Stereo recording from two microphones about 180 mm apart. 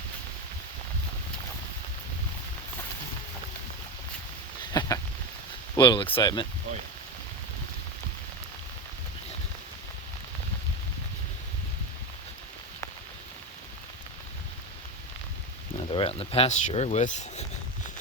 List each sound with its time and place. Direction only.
4.7 s a sound: 20° left (ahead or behind)
5.7 s speech: 25° left (ahead or behind)
15.9 s speech: 30° left (ahead or behind)